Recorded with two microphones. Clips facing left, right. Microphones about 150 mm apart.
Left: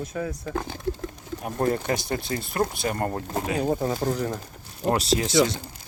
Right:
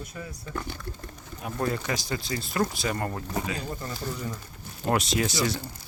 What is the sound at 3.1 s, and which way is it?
Speech, 30° left (ahead or behind).